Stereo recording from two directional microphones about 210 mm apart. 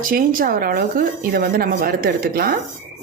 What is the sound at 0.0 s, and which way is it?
A woman's voice, 40° right (ahead or behind).